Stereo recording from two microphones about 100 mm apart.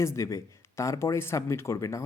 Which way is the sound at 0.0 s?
30° left (ahead or behind).